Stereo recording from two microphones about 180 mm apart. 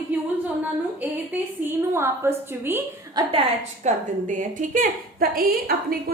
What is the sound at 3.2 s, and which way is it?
Speech, 30° right (ahead or behind).